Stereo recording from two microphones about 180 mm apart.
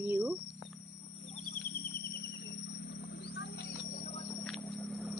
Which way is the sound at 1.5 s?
50° left (ahead or behind).